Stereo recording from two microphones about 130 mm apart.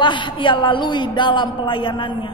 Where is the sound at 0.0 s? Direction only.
40° left (ahead or behind).